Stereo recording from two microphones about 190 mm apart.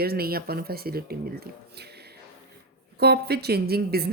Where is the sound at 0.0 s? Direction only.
55° right (ahead or behind).